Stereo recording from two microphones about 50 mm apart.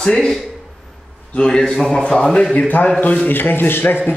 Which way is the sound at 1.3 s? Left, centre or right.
Centre.